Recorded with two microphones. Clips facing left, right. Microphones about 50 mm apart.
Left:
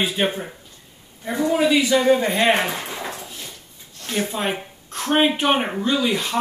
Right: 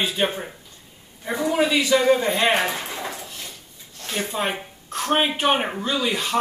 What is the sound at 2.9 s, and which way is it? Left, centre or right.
Dog, centre.